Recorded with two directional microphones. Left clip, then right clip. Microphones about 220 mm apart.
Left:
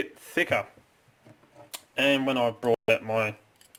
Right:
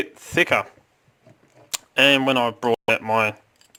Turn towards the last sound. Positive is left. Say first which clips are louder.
# right 5 dB
turn(degrees=-30)  # may be behind; listen again after turning